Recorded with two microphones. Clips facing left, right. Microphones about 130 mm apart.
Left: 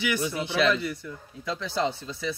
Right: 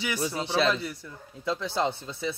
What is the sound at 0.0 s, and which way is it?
Speech, 30° right (ahead or behind).